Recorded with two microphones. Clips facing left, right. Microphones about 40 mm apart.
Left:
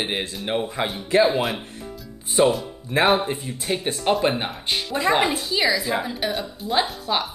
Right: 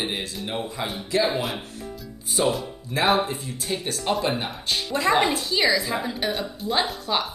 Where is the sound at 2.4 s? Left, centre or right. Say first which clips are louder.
Left 5 dB; left.